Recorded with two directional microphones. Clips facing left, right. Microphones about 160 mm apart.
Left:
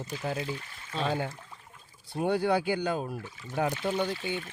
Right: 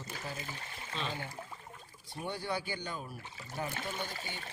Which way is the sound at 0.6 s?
30° right (ahead or behind).